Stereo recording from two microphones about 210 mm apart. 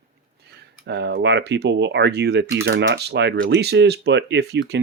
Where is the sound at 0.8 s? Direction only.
55° right (ahead or behind).